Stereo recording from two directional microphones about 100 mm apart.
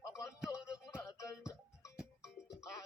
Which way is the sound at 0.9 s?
35° left (ahead or behind).